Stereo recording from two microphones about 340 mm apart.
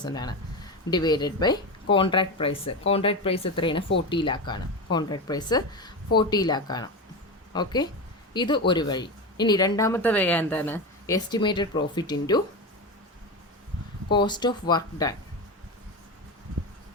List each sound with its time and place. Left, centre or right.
0.0 s speech: centre
14.1 s speech: centre